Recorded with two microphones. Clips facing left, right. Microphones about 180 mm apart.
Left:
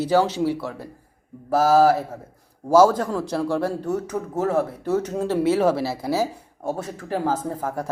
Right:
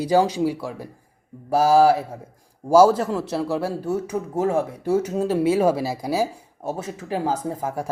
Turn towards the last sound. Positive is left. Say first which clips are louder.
# even
turn(degrees=-10)  # may be behind; listen again after turning